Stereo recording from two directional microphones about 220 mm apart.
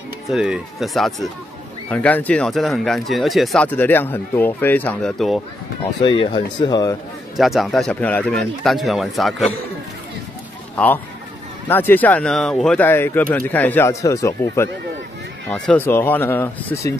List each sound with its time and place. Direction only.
0.3 s speech: centre (ahead or behind)
6.0 s speech: 20° left (ahead or behind)
7.3 s speech: centre (ahead or behind)
11.7 s speech: 10° left (ahead or behind)